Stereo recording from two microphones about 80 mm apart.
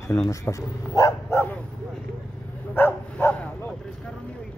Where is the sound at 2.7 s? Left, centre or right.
Left.